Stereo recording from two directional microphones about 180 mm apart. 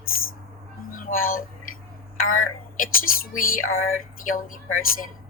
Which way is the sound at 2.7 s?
50° left (ahead or behind).